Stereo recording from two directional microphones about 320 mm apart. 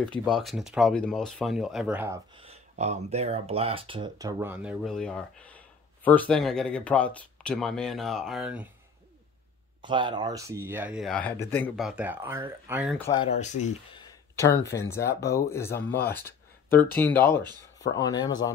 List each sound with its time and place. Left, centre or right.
0.0 s speech: centre
9.8 s speech: centre
13.0 s speech: centre
13.9 s speech: centre
17.3 s speech: centre
17.7 s speech: centre